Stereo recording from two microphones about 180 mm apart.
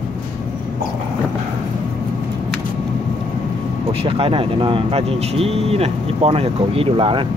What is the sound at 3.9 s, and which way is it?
Speech, 30° right (ahead or behind).